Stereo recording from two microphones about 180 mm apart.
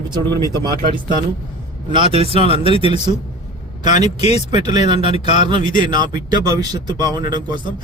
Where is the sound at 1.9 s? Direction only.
30° right (ahead or behind).